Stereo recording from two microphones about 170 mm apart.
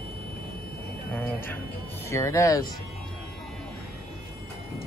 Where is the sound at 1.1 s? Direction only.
10° left (ahead or behind).